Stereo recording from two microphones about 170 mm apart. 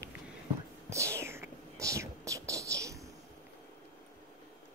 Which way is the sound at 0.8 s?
15° right (ahead or behind).